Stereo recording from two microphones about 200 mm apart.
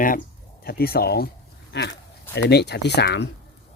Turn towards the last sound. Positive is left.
turn(degrees=55)  # may be behind; listen again after turning